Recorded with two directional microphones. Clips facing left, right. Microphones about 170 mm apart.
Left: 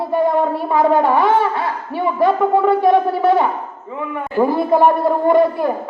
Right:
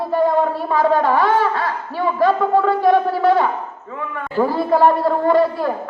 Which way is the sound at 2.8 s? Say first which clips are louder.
Left 1 dB; 20° left (ahead or behind).